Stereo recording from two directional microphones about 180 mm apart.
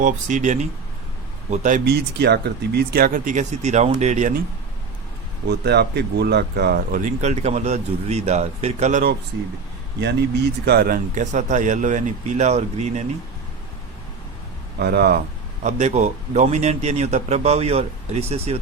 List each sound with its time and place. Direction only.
0.0 s speech: 45° right (ahead or behind)
5.5 s speech: 65° right (ahead or behind); by 9.0 s 40° right (ahead or behind)
10.0 s speech: 70° right (ahead or behind)
10.7 s speech: 55° right (ahead or behind); by 12.9 s 40° right (ahead or behind)
14.8 s speech: 60° right (ahead or behind)
15.6 s a man's voice: 40° right (ahead or behind)